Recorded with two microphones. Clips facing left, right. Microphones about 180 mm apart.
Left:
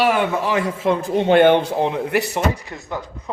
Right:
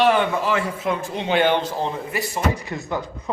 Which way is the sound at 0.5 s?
25° left (ahead or behind).